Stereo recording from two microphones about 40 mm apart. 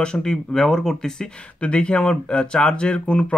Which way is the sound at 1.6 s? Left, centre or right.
Left.